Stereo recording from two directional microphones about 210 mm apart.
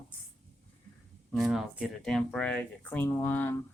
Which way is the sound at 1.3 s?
Centre (ahead or behind).